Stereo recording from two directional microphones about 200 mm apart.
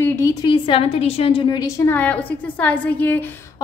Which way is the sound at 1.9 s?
10° left (ahead or behind).